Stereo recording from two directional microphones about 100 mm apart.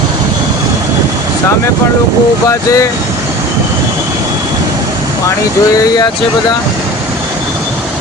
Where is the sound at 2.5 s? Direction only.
35° left (ahead or behind).